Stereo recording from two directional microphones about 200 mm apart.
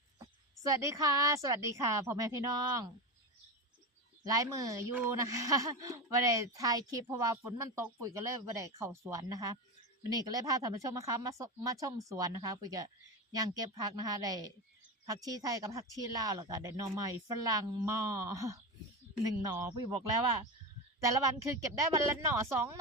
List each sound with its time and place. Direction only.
0.6 s speech: 15° right (ahead or behind)
4.2 s a woman's voice: 15° right (ahead or behind)
21.0 s speech: 15° right (ahead or behind)